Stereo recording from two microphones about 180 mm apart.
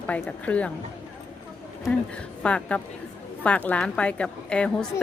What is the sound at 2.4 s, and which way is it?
Speech, 5° left (ahead or behind).